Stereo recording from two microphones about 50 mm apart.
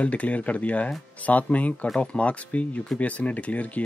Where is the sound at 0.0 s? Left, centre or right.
Left.